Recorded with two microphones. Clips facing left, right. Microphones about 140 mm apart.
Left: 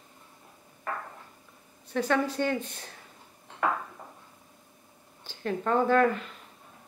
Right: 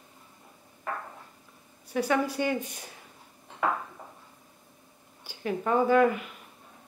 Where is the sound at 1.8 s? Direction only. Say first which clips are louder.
Even; 10° right (ahead or behind).